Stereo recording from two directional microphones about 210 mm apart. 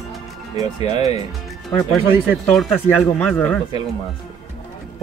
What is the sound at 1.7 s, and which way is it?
Speech, centre (ahead or behind).